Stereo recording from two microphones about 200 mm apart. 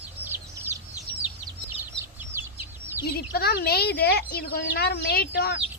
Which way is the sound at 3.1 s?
50° left (ahead or behind).